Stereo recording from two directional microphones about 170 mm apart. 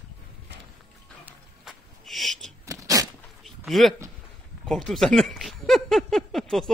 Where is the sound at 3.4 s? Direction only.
Centre (ahead or behind).